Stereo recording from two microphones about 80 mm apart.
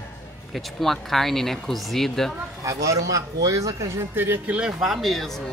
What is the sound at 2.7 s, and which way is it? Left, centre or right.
Speech, right.